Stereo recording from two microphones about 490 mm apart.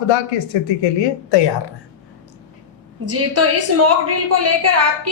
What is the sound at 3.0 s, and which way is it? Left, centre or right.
A woman's voice, right.